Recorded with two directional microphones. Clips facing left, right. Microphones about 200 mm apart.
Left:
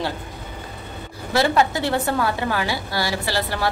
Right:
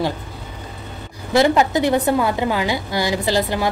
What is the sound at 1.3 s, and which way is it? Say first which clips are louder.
A woman's voice: right 4 dB; 15° right (ahead or behind).